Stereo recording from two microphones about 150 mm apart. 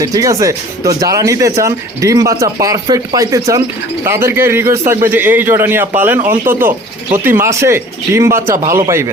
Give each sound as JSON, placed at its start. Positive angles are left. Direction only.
{"t": 0.0, "sound": "a man's voice", "side_deg": -25}